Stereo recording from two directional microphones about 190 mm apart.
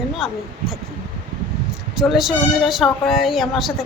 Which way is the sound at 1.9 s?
Centre (ahead or behind).